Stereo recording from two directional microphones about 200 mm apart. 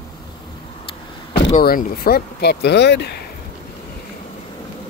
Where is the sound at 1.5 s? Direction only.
45° left (ahead or behind).